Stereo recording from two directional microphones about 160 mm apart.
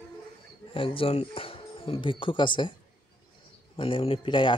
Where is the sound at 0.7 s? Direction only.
35° left (ahead or behind).